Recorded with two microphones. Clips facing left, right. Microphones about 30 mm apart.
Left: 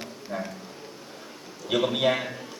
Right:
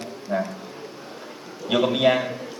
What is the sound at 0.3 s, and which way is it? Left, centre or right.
Speech, right.